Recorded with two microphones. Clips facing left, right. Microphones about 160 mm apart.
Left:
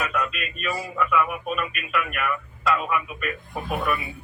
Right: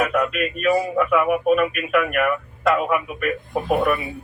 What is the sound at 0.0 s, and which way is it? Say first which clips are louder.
Speech: right 7 dB; 55° right (ahead or behind).